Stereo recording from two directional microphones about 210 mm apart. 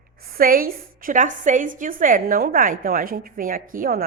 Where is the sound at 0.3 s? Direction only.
45° right (ahead or behind).